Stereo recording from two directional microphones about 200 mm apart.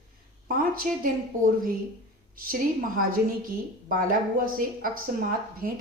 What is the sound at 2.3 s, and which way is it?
Speech, 45° right (ahead or behind).